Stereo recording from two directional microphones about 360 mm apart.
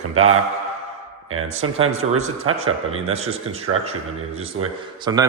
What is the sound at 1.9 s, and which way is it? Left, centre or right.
Speech, centre.